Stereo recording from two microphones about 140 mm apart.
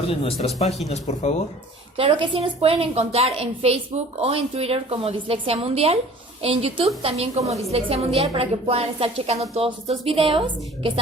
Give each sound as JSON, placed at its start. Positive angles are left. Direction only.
{"t": 0.1, "sound": "speech", "side_deg": 45}
{"t": 2.0, "sound": "a woman's voice", "side_deg": -40}